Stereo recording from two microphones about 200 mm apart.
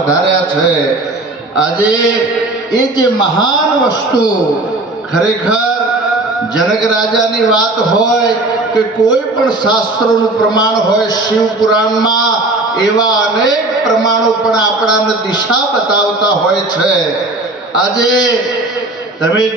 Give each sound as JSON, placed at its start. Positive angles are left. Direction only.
{"t": 1.5, "sound": "a man's voice", "side_deg": -5}
{"t": 3.2, "sound": "a man's voice", "side_deg": 20}
{"t": 5.1, "sound": "a man's voice", "side_deg": -5}
{"t": 8.7, "sound": "a man's voice", "side_deg": 20}